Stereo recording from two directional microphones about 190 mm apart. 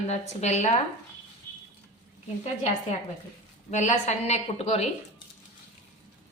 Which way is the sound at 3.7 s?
40° left (ahead or behind).